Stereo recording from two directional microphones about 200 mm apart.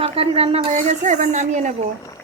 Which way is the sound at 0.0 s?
30° right (ahead or behind).